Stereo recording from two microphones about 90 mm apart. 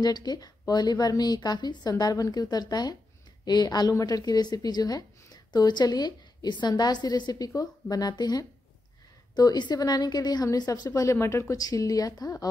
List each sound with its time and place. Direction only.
0.0 s a woman's voice: 50° left (ahead or behind)
11.0 s speech: 30° left (ahead or behind)
11.5 s speech: 40° left (ahead or behind)